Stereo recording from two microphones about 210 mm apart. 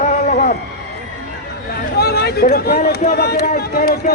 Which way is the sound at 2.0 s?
50° left (ahead or behind).